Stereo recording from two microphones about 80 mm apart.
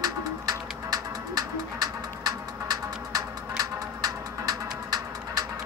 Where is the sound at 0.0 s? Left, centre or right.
Right.